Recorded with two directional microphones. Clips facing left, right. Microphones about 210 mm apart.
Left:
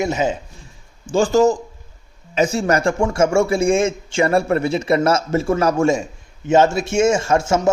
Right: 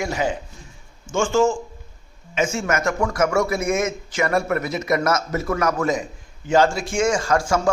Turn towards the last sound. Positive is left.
turn(degrees=25)  # may be behind; listen again after turning